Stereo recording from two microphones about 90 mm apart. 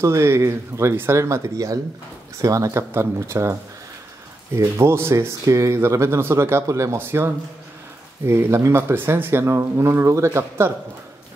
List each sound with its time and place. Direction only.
0.0 s speech: 30° right (ahead or behind)
4.6 s speech: 30° right (ahead or behind)